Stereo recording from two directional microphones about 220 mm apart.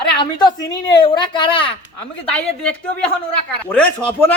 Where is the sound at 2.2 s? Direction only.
5° left (ahead or behind).